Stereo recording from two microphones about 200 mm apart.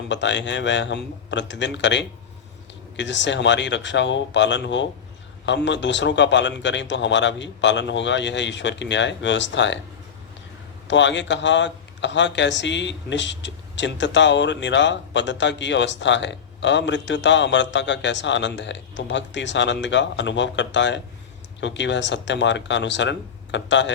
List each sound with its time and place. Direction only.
0.1 s a man's voice: 65° left (ahead or behind)
10.8 s a man's voice: 65° left (ahead or behind)